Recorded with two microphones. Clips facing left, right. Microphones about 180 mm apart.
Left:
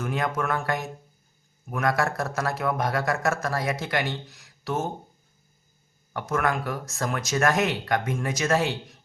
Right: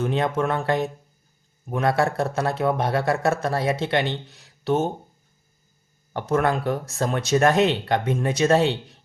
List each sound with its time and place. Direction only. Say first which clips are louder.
0.0 s speech: right 5 dB; 30° right (ahead or behind)
6.1 s speech: right 4 dB; 30° right (ahead or behind)